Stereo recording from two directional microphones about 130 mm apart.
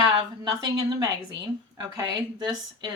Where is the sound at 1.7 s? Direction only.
35° right (ahead or behind).